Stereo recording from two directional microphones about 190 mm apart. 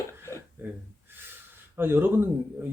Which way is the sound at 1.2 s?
10° right (ahead or behind).